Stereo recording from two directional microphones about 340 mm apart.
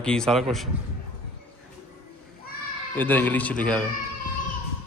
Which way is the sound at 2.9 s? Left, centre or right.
Centre.